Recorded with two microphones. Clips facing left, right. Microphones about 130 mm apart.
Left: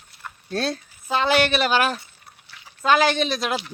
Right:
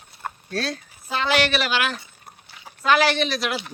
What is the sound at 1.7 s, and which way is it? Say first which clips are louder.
Speech: left 4 dB; 40° left (ahead or behind).